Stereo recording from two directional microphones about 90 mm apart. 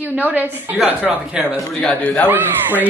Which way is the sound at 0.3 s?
20° right (ahead or behind).